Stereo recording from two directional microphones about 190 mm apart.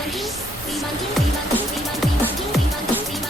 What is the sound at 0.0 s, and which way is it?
Music, centre (ahead or behind).